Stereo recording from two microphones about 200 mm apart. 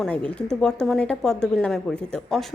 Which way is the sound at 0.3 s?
5° left (ahead or behind).